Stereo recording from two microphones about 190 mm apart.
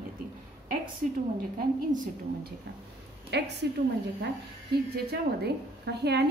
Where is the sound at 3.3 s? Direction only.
60° right (ahead or behind).